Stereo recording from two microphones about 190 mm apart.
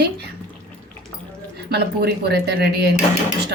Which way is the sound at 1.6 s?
60° right (ahead or behind).